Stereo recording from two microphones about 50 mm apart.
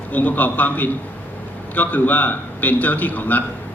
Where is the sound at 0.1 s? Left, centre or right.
Left.